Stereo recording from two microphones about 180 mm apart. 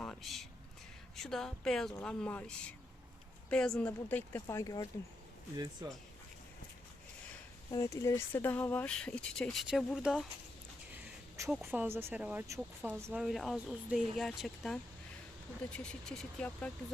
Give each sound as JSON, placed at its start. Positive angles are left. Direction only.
{"t": 0.0, "sound": "a sound", "side_deg": 0}
{"t": 1.1, "sound": "speech", "side_deg": 0}
{"t": 5.8, "sound": "speech", "side_deg": -20}
{"t": 7.7, "sound": "speech", "side_deg": 15}
{"t": 11.4, "sound": "speech", "side_deg": 0}